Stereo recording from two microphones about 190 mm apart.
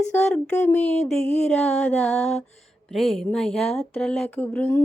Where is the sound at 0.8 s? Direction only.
35° left (ahead or behind).